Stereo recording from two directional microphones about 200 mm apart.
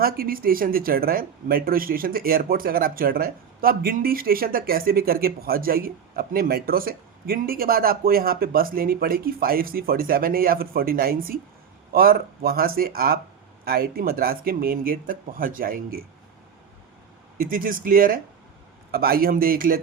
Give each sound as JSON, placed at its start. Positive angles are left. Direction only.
{"t": 0.0, "sound": "speech", "side_deg": -45}
{"t": 17.4, "sound": "speech", "side_deg": -45}